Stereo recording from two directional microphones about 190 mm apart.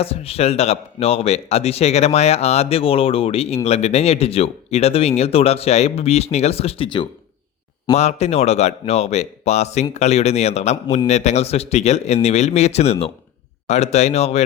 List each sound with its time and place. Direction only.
0.0 s speech: 30° left (ahead or behind)